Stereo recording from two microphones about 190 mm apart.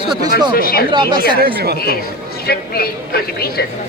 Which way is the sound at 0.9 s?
25° right (ahead or behind).